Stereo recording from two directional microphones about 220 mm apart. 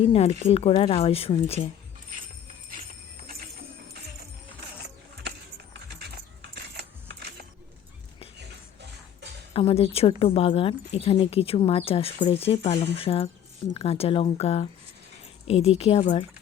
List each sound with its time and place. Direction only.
0.0 s speech: 25° left (ahead or behind)
9.5 s speech: 25° left (ahead or behind)